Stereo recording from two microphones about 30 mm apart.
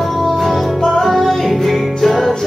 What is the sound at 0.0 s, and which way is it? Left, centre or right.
Music, centre.